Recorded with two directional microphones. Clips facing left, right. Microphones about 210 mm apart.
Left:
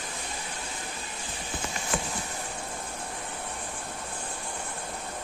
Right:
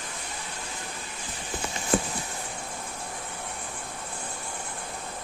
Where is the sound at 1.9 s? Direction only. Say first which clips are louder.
Right 7 dB; 35° right (ahead or behind).